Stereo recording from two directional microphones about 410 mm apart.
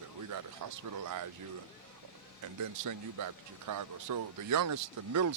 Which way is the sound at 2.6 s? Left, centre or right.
Right.